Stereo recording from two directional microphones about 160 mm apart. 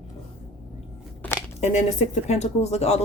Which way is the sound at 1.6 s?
45° left (ahead or behind).